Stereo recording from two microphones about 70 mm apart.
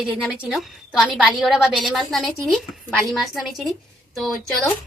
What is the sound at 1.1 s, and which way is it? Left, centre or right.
A woman's voice, centre.